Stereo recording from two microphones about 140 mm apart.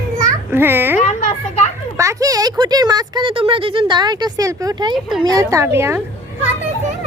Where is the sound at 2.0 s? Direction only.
25° right (ahead or behind).